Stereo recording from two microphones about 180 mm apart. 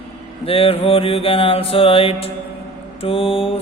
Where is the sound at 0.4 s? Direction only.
30° left (ahead or behind).